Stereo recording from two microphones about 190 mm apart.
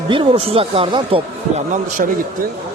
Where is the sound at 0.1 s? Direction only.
30° right (ahead or behind).